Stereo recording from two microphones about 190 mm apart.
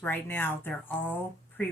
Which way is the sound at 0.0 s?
10° left (ahead or behind).